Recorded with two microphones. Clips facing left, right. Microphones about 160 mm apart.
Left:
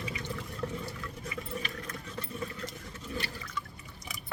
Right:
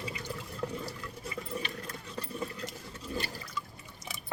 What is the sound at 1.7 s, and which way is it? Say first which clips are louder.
Sewing machine: even; 35° right (ahead or behind).